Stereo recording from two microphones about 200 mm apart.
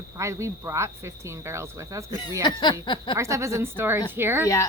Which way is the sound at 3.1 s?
15° right (ahead or behind).